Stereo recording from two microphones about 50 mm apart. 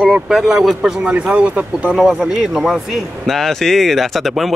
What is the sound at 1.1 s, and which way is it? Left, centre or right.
Speech, right.